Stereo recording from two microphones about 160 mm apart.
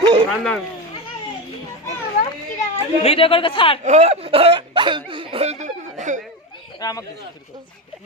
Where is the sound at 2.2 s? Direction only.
45° left (ahead or behind).